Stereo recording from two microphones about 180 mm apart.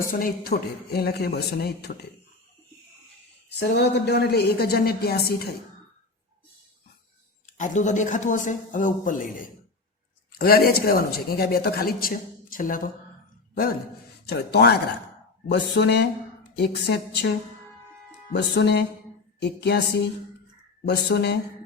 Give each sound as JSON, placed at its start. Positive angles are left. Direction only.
{"t": 0.1, "sound": "speech", "side_deg": 50}
{"t": 0.9, "sound": "speech", "side_deg": 60}
{"t": 3.5, "sound": "speech", "side_deg": 65}
{"t": 7.4, "sound": "speech", "side_deg": 45}
{"t": 10.3, "sound": "speech", "side_deg": 60}
{"t": 14.3, "sound": "speech", "side_deg": 65}
{"t": 15.4, "sound": "a sound", "side_deg": 70}
{"t": 18.3, "sound": "a sound", "side_deg": 70}
{"t": 20.8, "sound": "a sound", "side_deg": 70}